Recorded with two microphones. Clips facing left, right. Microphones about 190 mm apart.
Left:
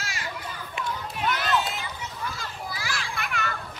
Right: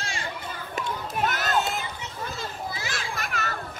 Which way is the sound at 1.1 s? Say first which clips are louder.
Right 1 dB; 45° right (ahead or behind).